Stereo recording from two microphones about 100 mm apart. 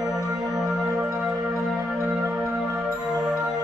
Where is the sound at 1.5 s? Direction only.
Centre (ahead or behind).